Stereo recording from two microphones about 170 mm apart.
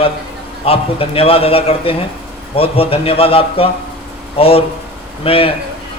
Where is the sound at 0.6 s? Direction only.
35° left (ahead or behind).